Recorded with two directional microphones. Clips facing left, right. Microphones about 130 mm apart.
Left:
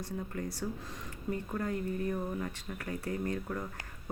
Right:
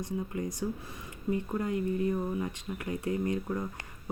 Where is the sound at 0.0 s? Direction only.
15° right (ahead or behind).